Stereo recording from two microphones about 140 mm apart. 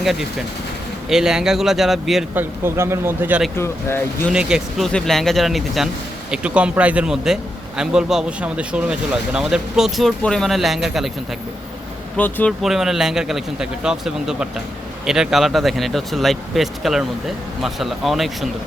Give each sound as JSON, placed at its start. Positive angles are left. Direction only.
{"t": 0.0, "sound": "speech", "side_deg": 0}
{"t": 2.3, "sound": "speech", "side_deg": -15}
{"t": 3.5, "sound": "speech", "side_deg": 15}
{"t": 4.3, "sound": "speech", "side_deg": -5}
{"t": 4.9, "sound": "speech", "side_deg": 5}
{"t": 12.1, "sound": "speech", "side_deg": 10}
{"t": 12.6, "sound": "speech", "side_deg": 0}